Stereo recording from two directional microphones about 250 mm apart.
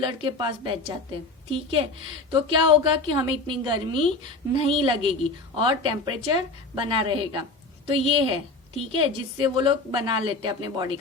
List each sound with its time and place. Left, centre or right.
0.0 s a woman's voice: centre